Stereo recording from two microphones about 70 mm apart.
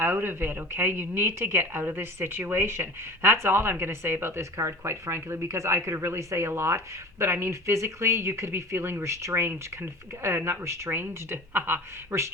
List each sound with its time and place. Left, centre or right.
0.0 s speech: right